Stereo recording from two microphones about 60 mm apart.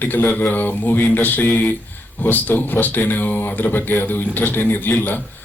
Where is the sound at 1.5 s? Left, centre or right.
Centre.